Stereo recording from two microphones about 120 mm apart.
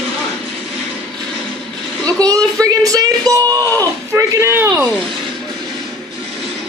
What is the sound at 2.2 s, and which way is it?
Speech, 30° right (ahead or behind).